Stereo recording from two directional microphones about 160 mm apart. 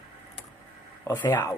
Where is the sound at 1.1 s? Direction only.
20° left (ahead or behind).